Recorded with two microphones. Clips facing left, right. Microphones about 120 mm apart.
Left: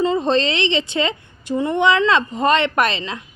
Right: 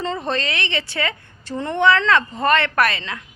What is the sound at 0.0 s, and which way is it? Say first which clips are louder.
Speech: left 7 dB; 20° left (ahead or behind).